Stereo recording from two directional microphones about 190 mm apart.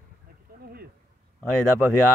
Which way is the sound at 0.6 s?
55° right (ahead or behind).